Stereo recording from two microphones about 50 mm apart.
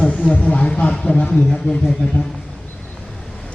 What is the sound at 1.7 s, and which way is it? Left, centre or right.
Speech, left.